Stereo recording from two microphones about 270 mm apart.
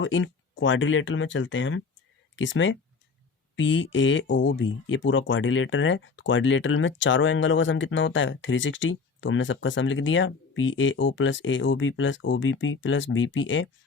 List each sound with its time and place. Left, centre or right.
0.0 s speech: left